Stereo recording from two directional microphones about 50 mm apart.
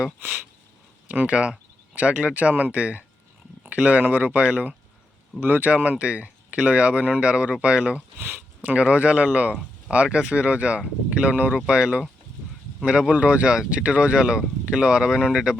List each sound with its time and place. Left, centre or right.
1.0 s speech: right
5.4 s speech: right; by 15.5 s centre